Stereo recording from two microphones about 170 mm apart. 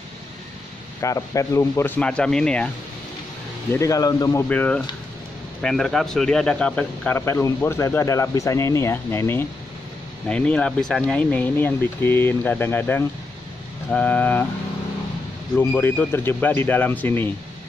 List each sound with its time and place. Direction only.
1.0 s a man's voice: 20° left (ahead or behind)
3.7 s a man's voice: 20° left (ahead or behind)
15.5 s a man's voice: 10° left (ahead or behind)